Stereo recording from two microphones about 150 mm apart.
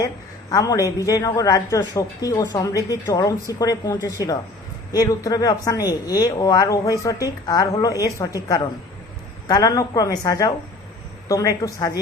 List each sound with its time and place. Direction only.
0.5 s a man's voice: 25° left (ahead or behind)
9.5 s a man's voice: 25° left (ahead or behind)